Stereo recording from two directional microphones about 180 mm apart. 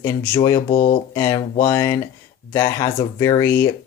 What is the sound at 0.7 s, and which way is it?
Speech, 45° left (ahead or behind).